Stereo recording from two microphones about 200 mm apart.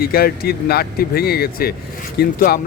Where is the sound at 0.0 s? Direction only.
50° left (ahead or behind).